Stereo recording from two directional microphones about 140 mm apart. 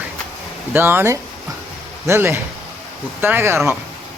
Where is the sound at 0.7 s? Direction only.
15° right (ahead or behind).